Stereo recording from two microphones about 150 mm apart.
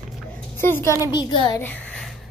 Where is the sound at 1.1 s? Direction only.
30° left (ahead or behind).